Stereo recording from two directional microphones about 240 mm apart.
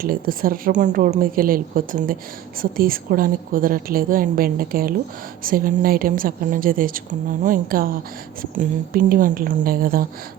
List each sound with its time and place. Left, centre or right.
0.0 s speech: right